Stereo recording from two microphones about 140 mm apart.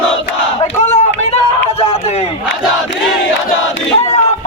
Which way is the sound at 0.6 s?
55° left (ahead or behind).